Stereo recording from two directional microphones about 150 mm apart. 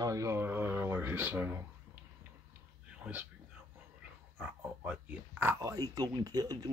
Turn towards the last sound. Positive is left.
turn(degrees=-25)  # may be behind; listen again after turning